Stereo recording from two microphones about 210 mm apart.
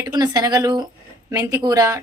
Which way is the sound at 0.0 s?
20° right (ahead or behind).